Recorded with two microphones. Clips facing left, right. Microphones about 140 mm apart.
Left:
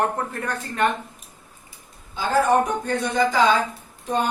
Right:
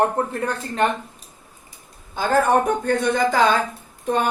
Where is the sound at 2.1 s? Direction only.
55° right (ahead or behind).